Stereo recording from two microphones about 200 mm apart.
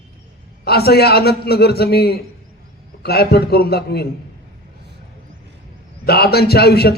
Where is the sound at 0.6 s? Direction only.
50° left (ahead or behind).